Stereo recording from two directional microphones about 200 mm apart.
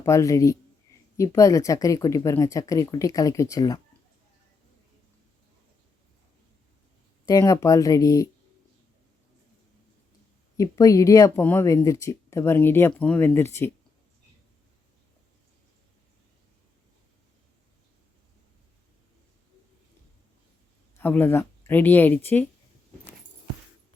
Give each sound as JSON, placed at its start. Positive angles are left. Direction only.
{"t": 0.0, "sound": "speech", "side_deg": 15}
{"t": 7.3, "sound": "speech", "side_deg": 20}
{"t": 10.6, "sound": "speech", "side_deg": 15}
{"t": 21.0, "sound": "speech", "side_deg": 10}